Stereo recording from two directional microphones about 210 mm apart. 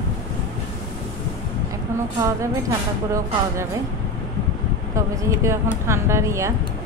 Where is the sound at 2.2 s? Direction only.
15° right (ahead or behind).